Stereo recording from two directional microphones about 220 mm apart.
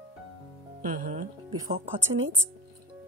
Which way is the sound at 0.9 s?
35° right (ahead or behind).